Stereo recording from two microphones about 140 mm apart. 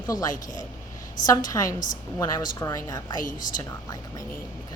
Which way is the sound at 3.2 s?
70° left (ahead or behind).